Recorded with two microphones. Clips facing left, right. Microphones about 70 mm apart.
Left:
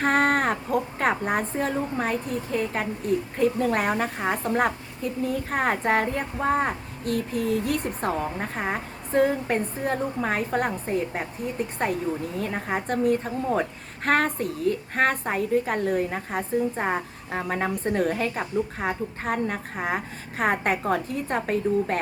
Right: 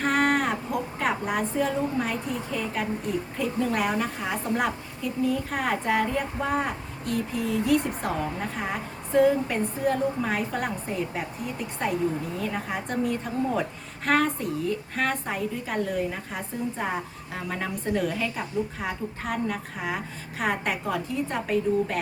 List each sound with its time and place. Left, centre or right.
0.0 s a sound: left
0.9 s a woman's voice: left
12.4 s a woman's voice: left